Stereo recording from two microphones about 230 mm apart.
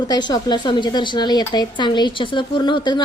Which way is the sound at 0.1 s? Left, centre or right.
Centre.